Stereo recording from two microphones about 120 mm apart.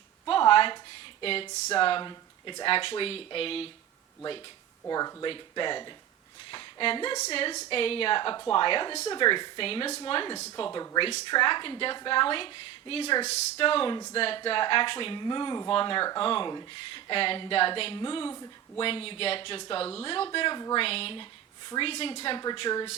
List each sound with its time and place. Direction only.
0.3 s a sound: 45° left (ahead or behind)
1.2 s speech: 50° left (ahead or behind)
4.9 s speech: 30° left (ahead or behind)
5.2 s a woman's voice: 40° left (ahead or behind)
10.7 s speech: 35° left (ahead or behind); by 22.4 s 50° left (ahead or behind)
22.5 s speech: 40° left (ahead or behind)